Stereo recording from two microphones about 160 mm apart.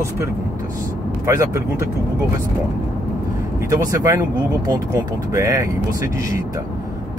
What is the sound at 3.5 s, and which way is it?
Speech, 20° right (ahead or behind).